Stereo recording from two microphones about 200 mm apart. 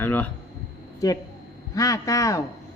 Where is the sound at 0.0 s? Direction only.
10° left (ahead or behind).